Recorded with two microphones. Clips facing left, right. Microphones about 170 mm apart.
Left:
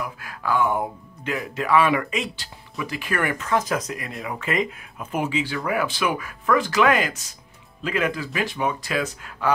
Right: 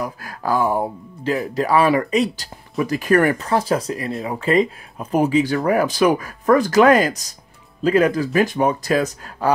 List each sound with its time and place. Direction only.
0.0 s speech: 40° right (ahead or behind)